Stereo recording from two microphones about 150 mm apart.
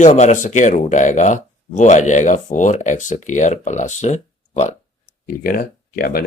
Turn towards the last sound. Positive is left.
turn(degrees=90)